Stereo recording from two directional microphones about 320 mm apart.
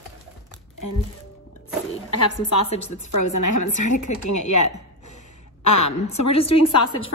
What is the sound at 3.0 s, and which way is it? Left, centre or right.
A woman's voice, left.